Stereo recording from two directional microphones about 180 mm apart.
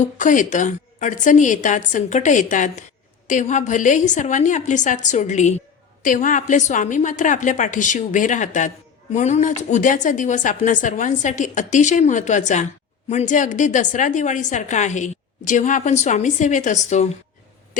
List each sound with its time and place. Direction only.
0.0 s a woman's voice: 45° left (ahead or behind)